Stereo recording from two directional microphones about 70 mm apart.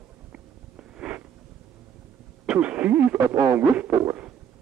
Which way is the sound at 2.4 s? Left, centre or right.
Centre.